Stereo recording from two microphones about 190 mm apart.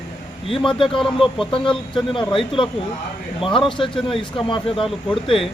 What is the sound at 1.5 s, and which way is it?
Speech, 25° left (ahead or behind).